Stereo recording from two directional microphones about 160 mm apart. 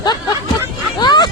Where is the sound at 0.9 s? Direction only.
25° left (ahead or behind).